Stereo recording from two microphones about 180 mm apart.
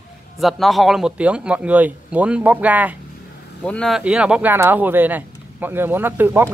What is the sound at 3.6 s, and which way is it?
Speech, 5° left (ahead or behind).